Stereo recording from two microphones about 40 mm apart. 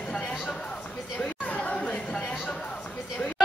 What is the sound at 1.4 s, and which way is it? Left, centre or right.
Chatter, left.